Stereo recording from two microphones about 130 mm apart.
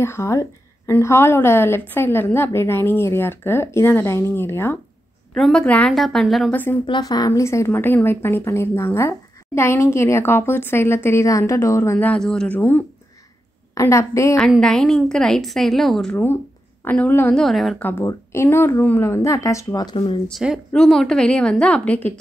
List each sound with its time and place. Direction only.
0.0 s a woman's voice: 20° left (ahead or behind)
5.3 s a woman's voice: 5° left (ahead or behind)
6.5 s a woman's voice: 15° left (ahead or behind)
6.9 s a woman's voice: 30° left (ahead or behind)
14.4 s a woman's voice: 5° left (ahead or behind)
17.4 s a woman's voice: centre (ahead or behind)
17.8 s a woman's voice: 15° left (ahead or behind); by 20.2 s 35° left (ahead or behind)
20.2 s a woman's voice: centre (ahead or behind)